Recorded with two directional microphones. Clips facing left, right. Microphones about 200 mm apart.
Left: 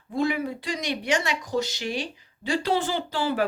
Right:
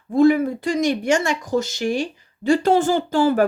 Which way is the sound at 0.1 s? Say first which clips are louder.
Right 10 dB; 50° right (ahead or behind).